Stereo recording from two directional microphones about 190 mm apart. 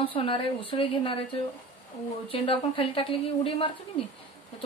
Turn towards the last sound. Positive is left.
turn(degrees=30)  # may be behind; listen again after turning